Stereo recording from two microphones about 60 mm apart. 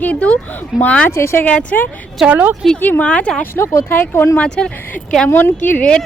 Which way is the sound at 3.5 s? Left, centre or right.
Left.